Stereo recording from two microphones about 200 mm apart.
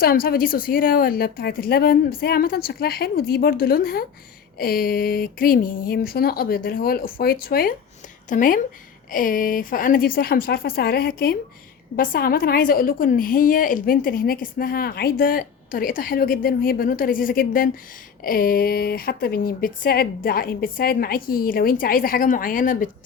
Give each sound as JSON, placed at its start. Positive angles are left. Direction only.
{"t": 0.0, "sound": "a woman's voice", "side_deg": 50}